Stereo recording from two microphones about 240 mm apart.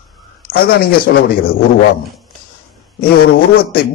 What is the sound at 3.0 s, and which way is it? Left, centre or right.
Speech, left.